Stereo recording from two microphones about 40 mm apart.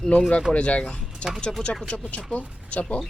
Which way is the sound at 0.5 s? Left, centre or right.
Left.